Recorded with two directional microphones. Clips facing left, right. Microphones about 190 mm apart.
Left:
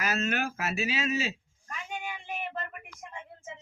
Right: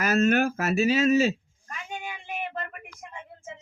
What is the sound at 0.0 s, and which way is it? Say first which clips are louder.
Speech: right 9 dB; 45° right (ahead or behind).